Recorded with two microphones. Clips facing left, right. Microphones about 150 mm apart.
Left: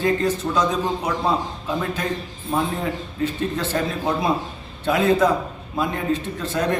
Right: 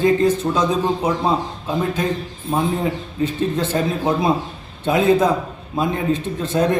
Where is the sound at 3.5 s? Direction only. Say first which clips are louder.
Right 3 dB; 20° right (ahead or behind).